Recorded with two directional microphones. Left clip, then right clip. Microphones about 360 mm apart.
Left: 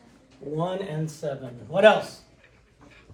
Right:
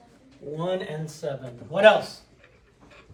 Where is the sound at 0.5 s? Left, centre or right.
Centre.